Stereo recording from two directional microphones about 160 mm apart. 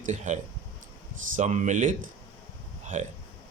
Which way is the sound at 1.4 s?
50° right (ahead or behind).